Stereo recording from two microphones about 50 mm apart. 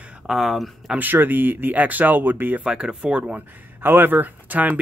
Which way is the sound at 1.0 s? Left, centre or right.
Right.